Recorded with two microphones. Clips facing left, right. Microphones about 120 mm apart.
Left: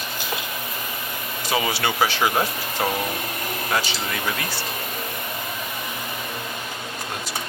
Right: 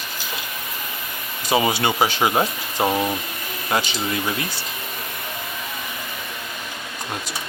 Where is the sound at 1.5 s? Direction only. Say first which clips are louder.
Right 4 dB; 20° right (ahead or behind).